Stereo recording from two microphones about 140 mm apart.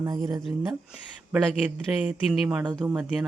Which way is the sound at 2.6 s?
30° right (ahead or behind).